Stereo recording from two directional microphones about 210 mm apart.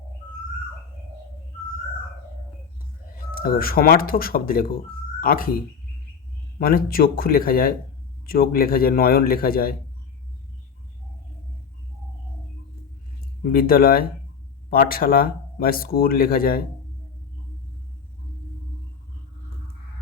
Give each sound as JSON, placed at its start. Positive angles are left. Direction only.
{"t": 3.3, "sound": "speech", "side_deg": 45}
{"t": 13.4, "sound": "speech", "side_deg": 45}